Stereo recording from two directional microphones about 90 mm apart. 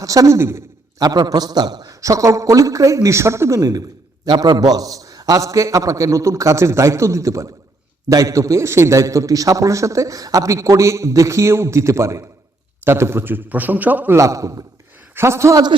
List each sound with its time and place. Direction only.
0.0 s a man's voice: 40° right (ahead or behind)
0.3 s a man's voice: 30° right (ahead or behind)
0.9 s a man's voice: 50° right (ahead or behind)
2.0 s a man's voice: 35° right (ahead or behind); by 14.2 s 20° right (ahead or behind)
14.2 s a man's voice: 35° right (ahead or behind)